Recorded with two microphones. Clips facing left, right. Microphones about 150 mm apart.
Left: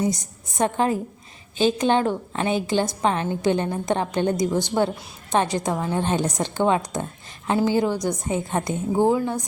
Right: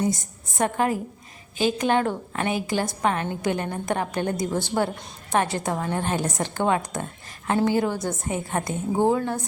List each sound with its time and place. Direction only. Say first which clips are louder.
0.0 s a woman's voice: left 1 dB; 20° left (ahead or behind)
8.9 s a woman's voice: left 2 dB; 15° right (ahead or behind)